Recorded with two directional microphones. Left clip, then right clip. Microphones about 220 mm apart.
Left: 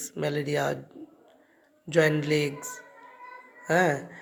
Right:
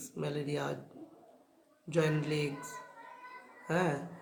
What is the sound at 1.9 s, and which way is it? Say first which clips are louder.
Speech: left 9 dB; 30° left (ahead or behind).